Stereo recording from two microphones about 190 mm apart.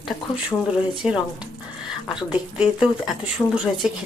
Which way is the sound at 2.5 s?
5° right (ahead or behind).